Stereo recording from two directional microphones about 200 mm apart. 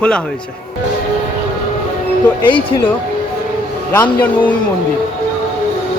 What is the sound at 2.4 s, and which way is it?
Speech, 25° left (ahead or behind).